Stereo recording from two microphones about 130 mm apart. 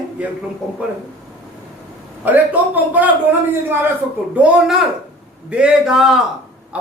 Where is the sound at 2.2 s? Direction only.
15° right (ahead or behind).